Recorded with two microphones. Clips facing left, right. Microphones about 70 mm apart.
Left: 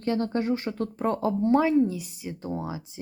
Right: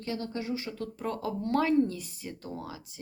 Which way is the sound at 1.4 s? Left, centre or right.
Centre.